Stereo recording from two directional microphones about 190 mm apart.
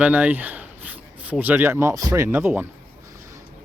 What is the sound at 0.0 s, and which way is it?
Speech, 10° right (ahead or behind).